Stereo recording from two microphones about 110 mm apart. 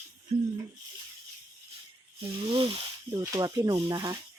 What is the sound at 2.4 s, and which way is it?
Speech, 50° right (ahead or behind).